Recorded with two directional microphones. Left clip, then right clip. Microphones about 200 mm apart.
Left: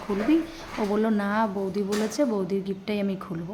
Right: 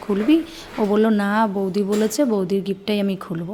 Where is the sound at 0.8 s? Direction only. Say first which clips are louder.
Right 7 dB; 30° right (ahead or behind).